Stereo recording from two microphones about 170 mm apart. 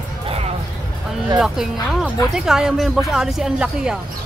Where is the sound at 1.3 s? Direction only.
Centre (ahead or behind).